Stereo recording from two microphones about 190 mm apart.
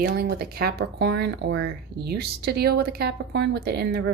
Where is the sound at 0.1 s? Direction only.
50° right (ahead or behind).